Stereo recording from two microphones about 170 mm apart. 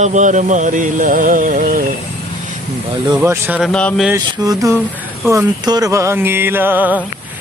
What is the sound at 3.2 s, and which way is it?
Speech, 10° right (ahead or behind).